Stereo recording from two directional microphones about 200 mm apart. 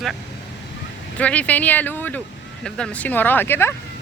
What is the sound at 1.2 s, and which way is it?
Speech, 5° left (ahead or behind).